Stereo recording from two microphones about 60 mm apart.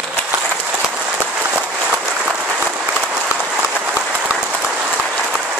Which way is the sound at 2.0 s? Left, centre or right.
Centre.